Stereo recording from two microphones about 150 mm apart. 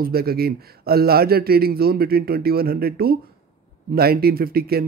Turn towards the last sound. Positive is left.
turn(degrees=-90)